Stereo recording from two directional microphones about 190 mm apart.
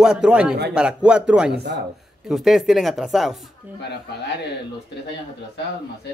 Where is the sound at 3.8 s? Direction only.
65° left (ahead or behind).